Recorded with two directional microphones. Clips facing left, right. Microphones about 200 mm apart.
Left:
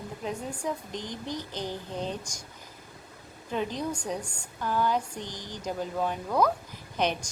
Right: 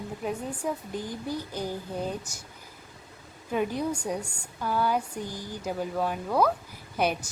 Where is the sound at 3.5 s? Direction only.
10° right (ahead or behind).